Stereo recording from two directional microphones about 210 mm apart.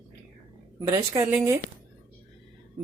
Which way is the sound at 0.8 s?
15° right (ahead or behind).